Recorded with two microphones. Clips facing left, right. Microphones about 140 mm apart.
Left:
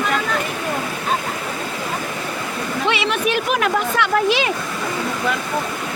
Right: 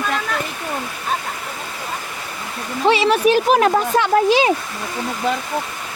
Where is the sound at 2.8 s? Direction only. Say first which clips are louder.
Right 7 dB; 40° right (ahead or behind).